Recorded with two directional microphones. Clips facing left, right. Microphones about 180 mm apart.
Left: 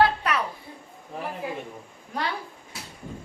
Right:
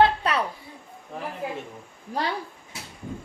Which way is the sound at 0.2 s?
30° right (ahead or behind).